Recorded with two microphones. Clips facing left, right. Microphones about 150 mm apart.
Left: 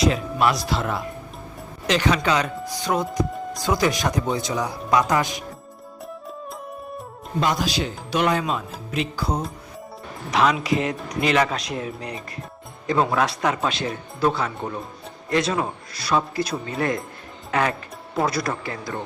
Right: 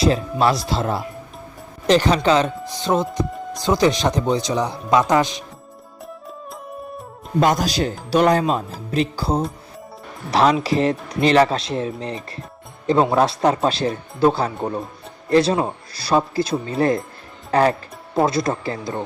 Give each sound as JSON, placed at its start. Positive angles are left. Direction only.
{"t": 0.0, "sound": "a man's voice", "side_deg": -30}
{"t": 7.3, "sound": "a man's voice", "side_deg": -45}